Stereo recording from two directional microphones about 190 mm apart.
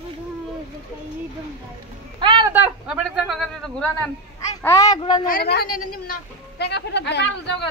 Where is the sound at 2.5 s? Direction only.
5° right (ahead or behind).